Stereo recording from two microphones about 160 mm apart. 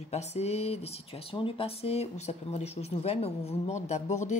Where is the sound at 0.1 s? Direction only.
40° left (ahead or behind).